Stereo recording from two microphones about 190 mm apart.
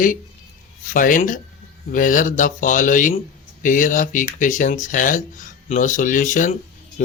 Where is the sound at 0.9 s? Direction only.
45° left (ahead or behind).